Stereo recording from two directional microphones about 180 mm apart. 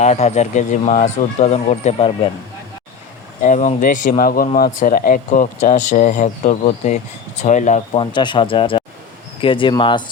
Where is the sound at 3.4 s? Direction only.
40° left (ahead or behind).